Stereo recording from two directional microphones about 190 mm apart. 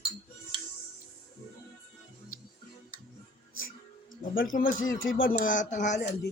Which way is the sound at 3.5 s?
90° left.